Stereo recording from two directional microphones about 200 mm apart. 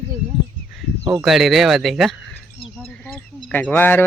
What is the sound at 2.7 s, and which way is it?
Bird, 5° left (ahead or behind).